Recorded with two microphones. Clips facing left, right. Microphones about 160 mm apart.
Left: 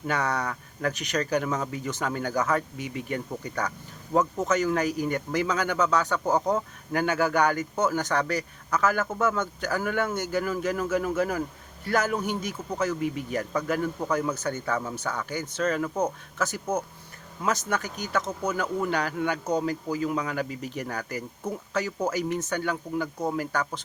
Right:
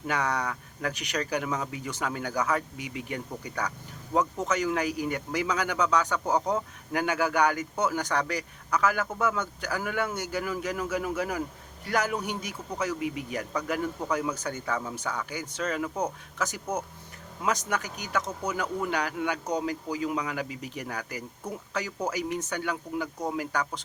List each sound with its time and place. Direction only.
0.1 s speech: 15° right (ahead or behind)